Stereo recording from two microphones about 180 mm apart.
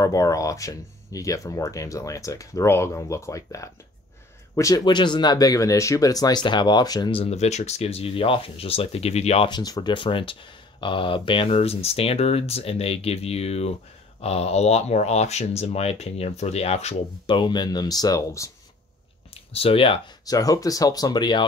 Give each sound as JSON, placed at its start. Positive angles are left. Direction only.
{"t": 0.0, "sound": "speech", "side_deg": 20}
{"t": 19.3, "sound": "speech", "side_deg": 35}